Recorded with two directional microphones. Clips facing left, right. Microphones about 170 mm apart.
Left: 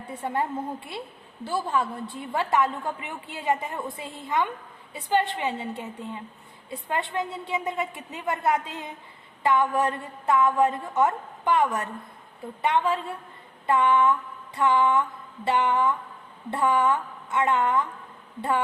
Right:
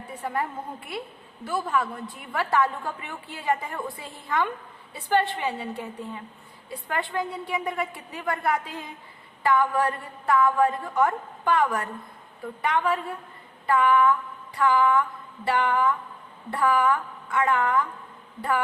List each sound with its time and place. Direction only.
0.2 s a woman's voice: 25° left (ahead or behind)